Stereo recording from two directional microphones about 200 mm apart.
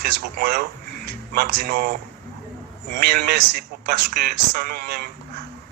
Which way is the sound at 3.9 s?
50° right (ahead or behind).